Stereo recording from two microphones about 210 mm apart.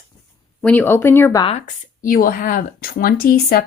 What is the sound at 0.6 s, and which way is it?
Speech, 10° left (ahead or behind).